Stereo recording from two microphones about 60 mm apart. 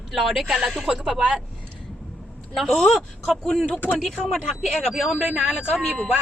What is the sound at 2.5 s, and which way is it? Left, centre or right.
A woman's voice, centre.